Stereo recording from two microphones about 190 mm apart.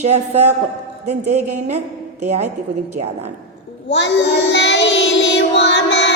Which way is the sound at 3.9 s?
70° left (ahead or behind).